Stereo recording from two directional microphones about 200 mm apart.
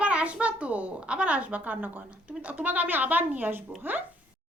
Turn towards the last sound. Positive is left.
turn(degrees=-10)  # may be behind; listen again after turning